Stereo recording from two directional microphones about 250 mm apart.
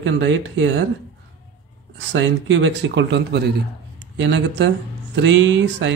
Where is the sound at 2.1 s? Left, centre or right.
Right.